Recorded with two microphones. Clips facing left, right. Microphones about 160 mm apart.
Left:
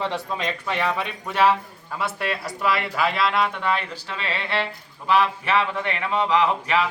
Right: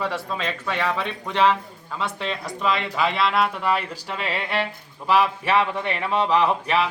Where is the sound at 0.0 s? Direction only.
20° left (ahead or behind); by 6.2 s 5° right (ahead or behind).